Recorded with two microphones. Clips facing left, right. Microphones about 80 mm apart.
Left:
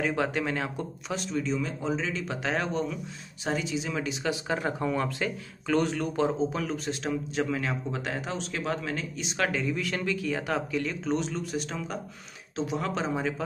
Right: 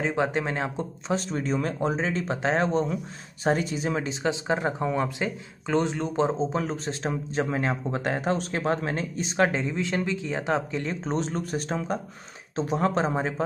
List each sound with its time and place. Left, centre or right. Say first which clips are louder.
0.0 s speech: right 2 dB; right
3.4 s speech: right 5 dB; right
3.9 s speech: right 3 dB; right